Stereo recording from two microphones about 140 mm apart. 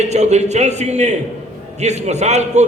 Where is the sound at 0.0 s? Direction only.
55° right (ahead or behind).